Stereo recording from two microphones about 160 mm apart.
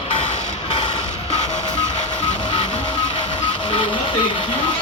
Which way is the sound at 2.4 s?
30° left (ahead or behind).